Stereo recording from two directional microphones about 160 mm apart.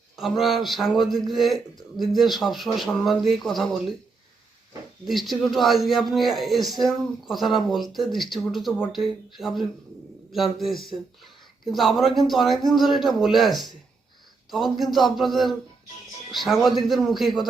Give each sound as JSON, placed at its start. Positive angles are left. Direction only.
{"t": 0.2, "sound": "speech", "side_deg": 0}
{"t": 5.0, "sound": "speech", "side_deg": 0}